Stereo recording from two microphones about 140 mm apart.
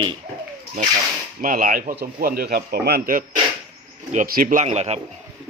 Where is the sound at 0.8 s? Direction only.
80° right; by 5.0 s 50° right (ahead or behind).